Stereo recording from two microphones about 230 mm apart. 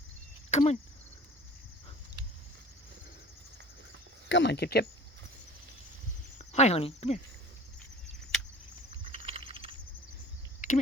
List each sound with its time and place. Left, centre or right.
0.5 s speech: left
4.3 s speech: left
6.4 s speech: left
9.0 s typing: right
9.5 s a sound: right
10.6 s a sound: left